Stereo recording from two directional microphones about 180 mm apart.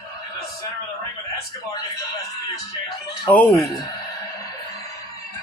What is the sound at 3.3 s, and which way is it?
Speech, 10° left (ahead or behind).